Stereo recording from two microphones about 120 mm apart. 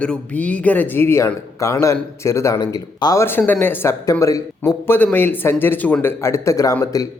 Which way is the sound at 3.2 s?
15° left (ahead or behind).